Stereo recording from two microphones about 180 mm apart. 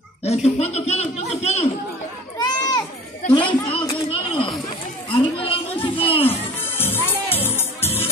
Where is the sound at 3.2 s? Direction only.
30° left (ahead or behind).